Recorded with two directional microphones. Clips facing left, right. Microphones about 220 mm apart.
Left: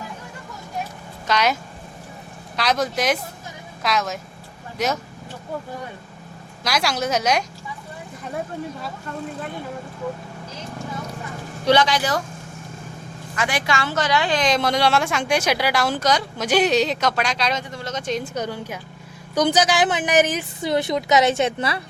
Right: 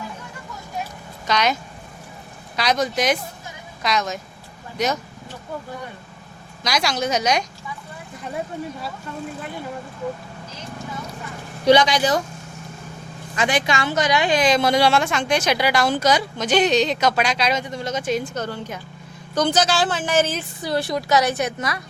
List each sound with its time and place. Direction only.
1.3 s a woman's voice: 5° left (ahead or behind)
2.6 s a woman's voice: 5° left (ahead or behind)
6.7 s a woman's voice: 5° left (ahead or behind)
11.6 s a woman's voice: 15° right (ahead or behind)
13.3 s a woman's voice: 20° right (ahead or behind)
14.4 s a woman's voice: 5° right (ahead or behind)
17.6 s a woman's voice: 15° right (ahead or behind)
18.2 s a woman's voice: 15° left (ahead or behind); by 21.8 s 30° left (ahead or behind)